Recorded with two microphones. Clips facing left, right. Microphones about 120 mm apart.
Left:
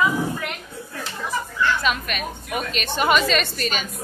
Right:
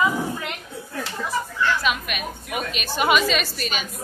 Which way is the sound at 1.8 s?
5° right (ahead or behind).